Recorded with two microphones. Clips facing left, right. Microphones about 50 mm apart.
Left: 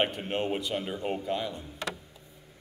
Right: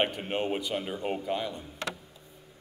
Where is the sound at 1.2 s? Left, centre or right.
Centre.